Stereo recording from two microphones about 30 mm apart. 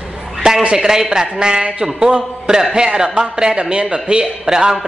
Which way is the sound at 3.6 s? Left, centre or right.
Right.